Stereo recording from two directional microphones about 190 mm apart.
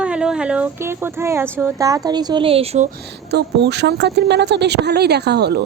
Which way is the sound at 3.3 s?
60° right (ahead or behind).